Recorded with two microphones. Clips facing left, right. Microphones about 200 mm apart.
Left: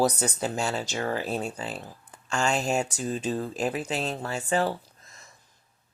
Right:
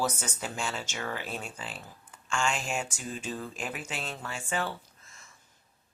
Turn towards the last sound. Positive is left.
turn(degrees=40)  # may be behind; listen again after turning